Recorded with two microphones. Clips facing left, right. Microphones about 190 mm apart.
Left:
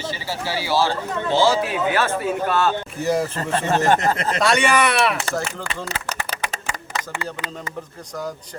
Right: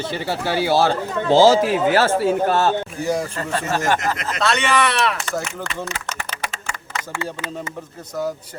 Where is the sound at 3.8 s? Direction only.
35° left (ahead or behind).